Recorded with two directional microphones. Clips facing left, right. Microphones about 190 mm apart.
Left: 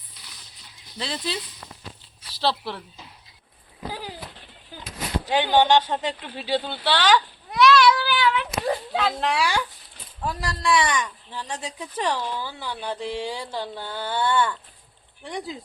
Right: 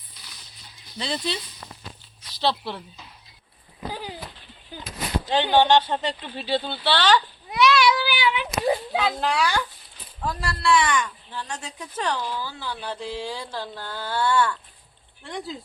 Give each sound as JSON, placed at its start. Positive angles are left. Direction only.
{"t": 0.9, "sound": "speech", "side_deg": 0}
{"t": 2.4, "sound": "speech", "side_deg": 0}
{"t": 4.7, "sound": "a sound", "side_deg": 5}
{"t": 5.2, "sound": "speech", "side_deg": 10}
{"t": 7.5, "sound": "cat", "side_deg": -5}
{"t": 10.4, "sound": "speech", "side_deg": 15}